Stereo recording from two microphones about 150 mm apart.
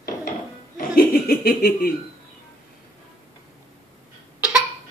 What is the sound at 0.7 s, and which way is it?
Speech, 80° left.